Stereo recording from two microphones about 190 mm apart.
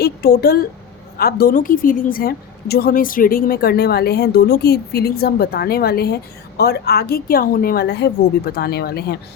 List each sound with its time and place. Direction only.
0.0 s a woman's voice: 55° left (ahead or behind)